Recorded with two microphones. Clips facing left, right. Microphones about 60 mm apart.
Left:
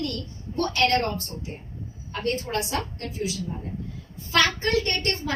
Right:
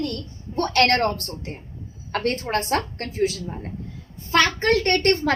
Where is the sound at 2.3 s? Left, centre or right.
Right.